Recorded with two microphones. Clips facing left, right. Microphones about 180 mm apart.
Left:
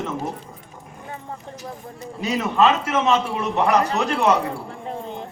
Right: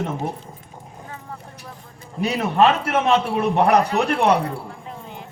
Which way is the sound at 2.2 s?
60° right (ahead or behind).